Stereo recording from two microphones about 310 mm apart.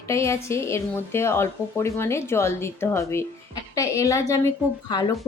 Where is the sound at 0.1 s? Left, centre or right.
Centre.